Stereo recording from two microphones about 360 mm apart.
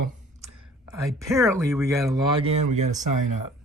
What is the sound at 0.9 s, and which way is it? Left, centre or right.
Speech, centre.